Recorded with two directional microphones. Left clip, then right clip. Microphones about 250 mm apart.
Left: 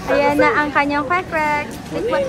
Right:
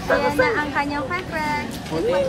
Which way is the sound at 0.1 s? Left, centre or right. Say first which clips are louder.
Left 4 dB; centre.